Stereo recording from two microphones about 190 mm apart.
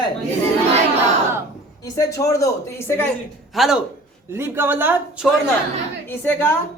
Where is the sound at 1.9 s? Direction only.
15° left (ahead or behind).